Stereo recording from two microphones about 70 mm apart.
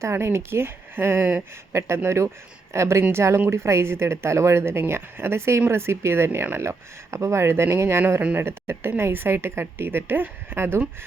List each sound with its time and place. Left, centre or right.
0.0 s speech: right
1.7 s speech: right